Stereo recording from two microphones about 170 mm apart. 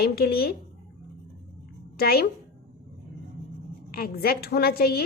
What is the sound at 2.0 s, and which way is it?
Speech, 65° left (ahead or behind).